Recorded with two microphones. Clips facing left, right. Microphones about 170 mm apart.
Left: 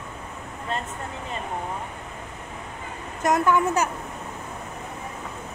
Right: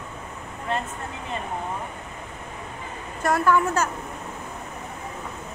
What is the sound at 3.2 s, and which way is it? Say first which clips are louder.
Speech: even; 20° left (ahead or behind).